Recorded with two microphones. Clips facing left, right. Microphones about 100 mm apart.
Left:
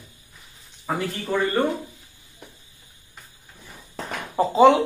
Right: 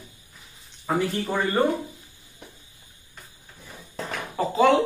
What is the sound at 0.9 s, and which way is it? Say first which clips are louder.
Speech: right 2 dB; 5° left (ahead or behind).